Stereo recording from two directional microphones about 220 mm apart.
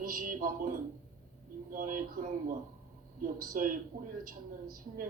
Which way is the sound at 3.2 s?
40° right (ahead or behind).